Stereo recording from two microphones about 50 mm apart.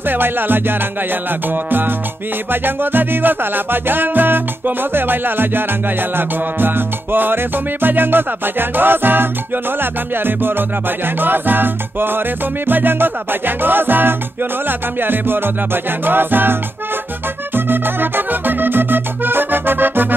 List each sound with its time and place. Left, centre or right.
0.1 s music: right
11.1 s music: right
17.6 s music: right